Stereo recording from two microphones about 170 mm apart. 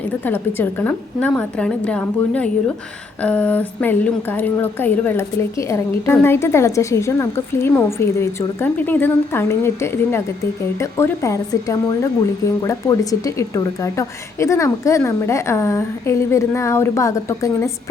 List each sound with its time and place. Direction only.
0.3 s a woman's voice: 10° left (ahead or behind)